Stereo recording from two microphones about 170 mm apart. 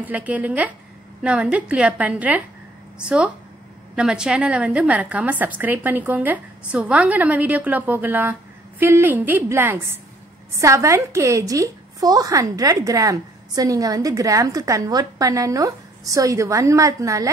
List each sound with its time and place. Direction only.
0.0 s a woman's voice: 10° right (ahead or behind)